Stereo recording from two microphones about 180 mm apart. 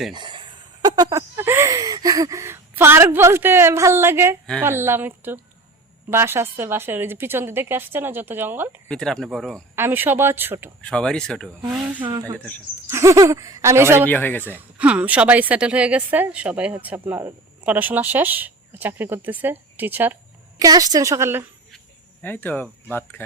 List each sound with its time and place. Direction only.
0.1 s a sound: 25° right (ahead or behind)
4.6 s speech: 15° right (ahead or behind)
8.9 s speech: 5° left (ahead or behind)
9.7 s speech: 10° right (ahead or behind)
10.8 s speech: 5° left (ahead or behind); by 14.1 s 15° right (ahead or behind)
14.1 s speech: 10° left (ahead or behind)
14.4 s a woman's voice: 10° right (ahead or behind)
22.2 s speech: 10° left (ahead or behind)